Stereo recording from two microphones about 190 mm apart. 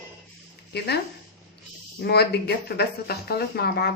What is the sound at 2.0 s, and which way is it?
Speech, 60° left (ahead or behind).